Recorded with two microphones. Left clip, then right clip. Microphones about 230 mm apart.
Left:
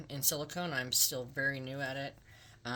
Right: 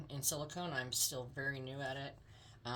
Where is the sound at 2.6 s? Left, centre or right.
Left.